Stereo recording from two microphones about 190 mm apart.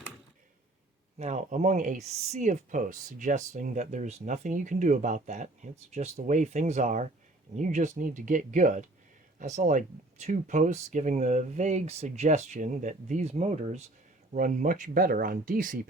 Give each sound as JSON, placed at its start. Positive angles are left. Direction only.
{"t": 1.2, "sound": "speech", "side_deg": -40}